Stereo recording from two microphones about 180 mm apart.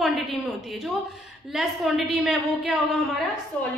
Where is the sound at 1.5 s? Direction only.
Centre (ahead or behind).